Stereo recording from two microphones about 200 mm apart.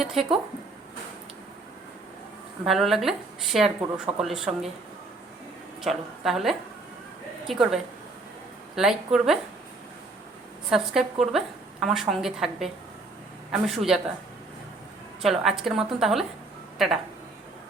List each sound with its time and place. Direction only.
0.0 s speech: centre (ahead or behind)
2.6 s speech: centre (ahead or behind)
5.8 s a woman's voice: centre (ahead or behind)
10.7 s speech: centre (ahead or behind)
15.2 s speech: centre (ahead or behind)